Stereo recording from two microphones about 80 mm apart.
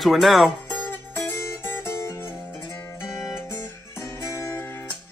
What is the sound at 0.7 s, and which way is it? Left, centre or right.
Music, left.